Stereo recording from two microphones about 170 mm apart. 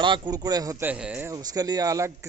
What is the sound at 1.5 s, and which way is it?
Speech, 20° right (ahead or behind).